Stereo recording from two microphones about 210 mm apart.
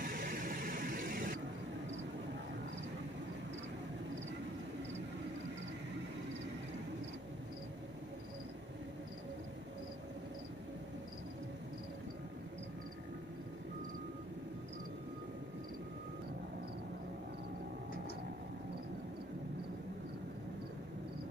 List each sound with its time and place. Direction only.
0.0 s vehicle: 40° right (ahead or behind)